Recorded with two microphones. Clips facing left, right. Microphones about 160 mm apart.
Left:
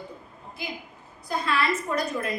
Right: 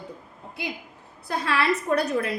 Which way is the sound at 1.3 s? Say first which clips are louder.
Right 2 dB; 70° right (ahead or behind).